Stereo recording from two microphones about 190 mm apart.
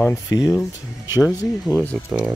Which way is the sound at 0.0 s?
15° left (ahead or behind).